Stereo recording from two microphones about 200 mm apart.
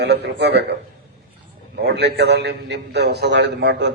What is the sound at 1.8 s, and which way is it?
A man's voice, 55° right (ahead or behind).